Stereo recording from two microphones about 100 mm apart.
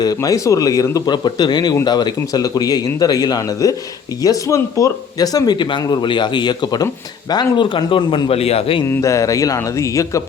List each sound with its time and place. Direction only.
0.0 s a man's voice: 35° left (ahead or behind); by 8.8 s 75° left (ahead or behind)
8.9 s a man's voice: 30° left (ahead or behind)